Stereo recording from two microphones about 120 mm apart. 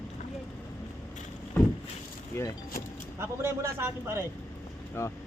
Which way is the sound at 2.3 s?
20° left (ahead or behind).